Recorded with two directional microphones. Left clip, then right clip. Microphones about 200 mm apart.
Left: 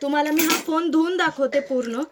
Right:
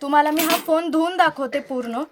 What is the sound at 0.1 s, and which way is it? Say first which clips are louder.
Speech: right 4 dB; 35° right (ahead or behind).